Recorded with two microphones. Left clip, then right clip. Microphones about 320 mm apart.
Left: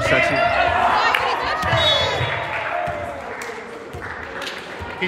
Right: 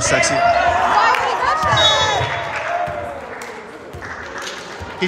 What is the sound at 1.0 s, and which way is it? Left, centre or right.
Crowd, right.